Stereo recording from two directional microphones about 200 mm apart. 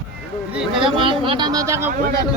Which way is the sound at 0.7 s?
25° right (ahead or behind).